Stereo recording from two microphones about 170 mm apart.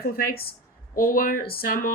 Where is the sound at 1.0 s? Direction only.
55° left (ahead or behind).